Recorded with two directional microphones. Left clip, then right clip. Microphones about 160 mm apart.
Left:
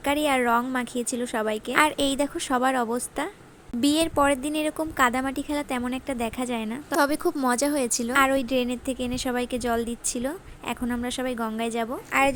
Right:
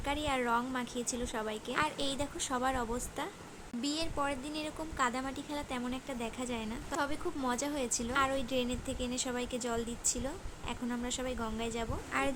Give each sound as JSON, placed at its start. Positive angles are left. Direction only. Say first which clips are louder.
{"t": 0.0, "sound": "a woman's voice", "louder": "left 11 dB", "side_deg": 40}